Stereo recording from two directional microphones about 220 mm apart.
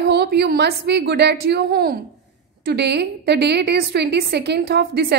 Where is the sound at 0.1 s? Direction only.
50° right (ahead or behind).